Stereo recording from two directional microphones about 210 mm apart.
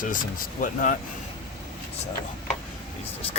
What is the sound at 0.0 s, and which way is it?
Speech, 40° left (ahead or behind).